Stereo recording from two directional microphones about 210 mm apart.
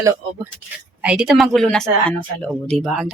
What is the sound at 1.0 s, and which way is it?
Speech, 5° right (ahead or behind).